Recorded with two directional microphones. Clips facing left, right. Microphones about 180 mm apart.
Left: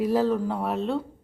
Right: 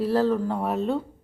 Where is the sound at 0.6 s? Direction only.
5° right (ahead or behind).